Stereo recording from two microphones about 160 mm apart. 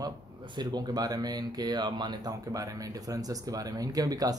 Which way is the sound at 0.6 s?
25° right (ahead or behind).